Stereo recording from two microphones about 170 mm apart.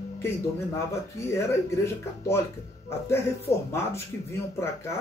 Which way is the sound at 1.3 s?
15° left (ahead or behind).